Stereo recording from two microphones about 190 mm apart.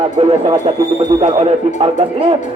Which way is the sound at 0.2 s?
30° right (ahead or behind).